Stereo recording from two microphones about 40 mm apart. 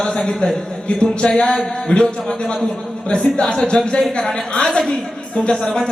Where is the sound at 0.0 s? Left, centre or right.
Centre.